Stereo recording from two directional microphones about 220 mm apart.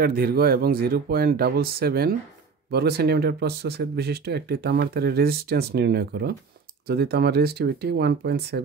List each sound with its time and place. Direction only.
0.0 s speech: 40° right (ahead or behind)